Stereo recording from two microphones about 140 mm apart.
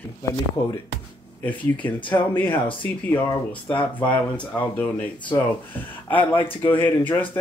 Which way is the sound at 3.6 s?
35° left (ahead or behind).